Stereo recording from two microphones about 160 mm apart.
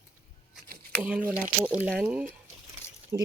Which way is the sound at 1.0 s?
10° right (ahead or behind).